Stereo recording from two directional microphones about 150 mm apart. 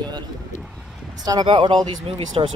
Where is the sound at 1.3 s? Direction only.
30° right (ahead or behind).